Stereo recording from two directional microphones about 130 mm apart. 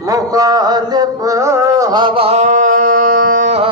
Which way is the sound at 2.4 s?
70° right (ahead or behind).